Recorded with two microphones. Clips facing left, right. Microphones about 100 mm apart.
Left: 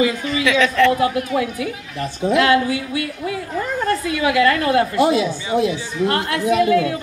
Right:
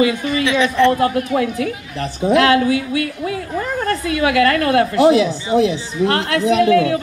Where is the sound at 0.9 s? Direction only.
45° right (ahead or behind).